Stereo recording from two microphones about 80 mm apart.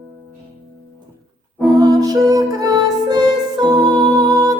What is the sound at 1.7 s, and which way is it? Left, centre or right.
Music, right.